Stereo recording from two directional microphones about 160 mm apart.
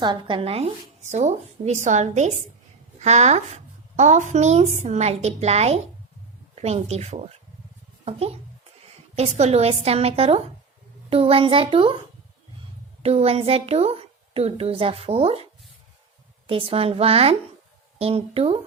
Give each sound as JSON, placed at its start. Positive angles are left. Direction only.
{"t": 0.0, "sound": "a woman's voice", "side_deg": -30}
{"t": 9.4, "sound": "a woman's voice", "side_deg": -40}
{"t": 13.0, "sound": "a woman's voice", "side_deg": -40}
{"t": 16.5, "sound": "a woman's voice", "side_deg": -35}